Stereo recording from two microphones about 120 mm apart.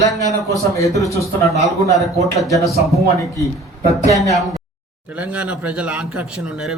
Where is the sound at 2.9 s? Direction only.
25° left (ahead or behind).